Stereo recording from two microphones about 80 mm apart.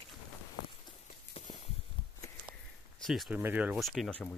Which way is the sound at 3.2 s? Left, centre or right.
Right.